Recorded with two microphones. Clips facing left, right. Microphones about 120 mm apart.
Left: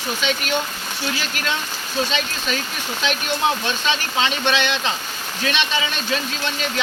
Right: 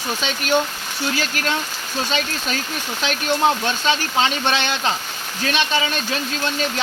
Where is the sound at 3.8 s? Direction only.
40° right (ahead or behind).